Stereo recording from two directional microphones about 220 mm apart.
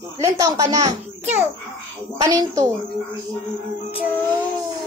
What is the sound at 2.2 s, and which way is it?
Speech, 15° right (ahead or behind).